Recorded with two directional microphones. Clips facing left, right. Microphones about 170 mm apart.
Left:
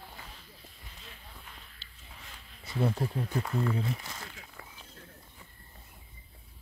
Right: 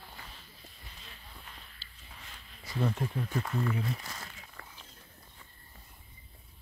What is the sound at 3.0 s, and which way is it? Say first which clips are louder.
Speech: left 2 dB; 35° left (ahead or behind).